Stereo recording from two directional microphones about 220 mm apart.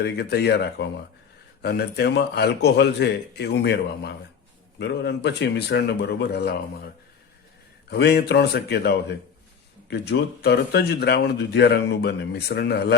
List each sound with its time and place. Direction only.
0.0 s speech: 45° left (ahead or behind)
7.9 s speech: 50° left (ahead or behind)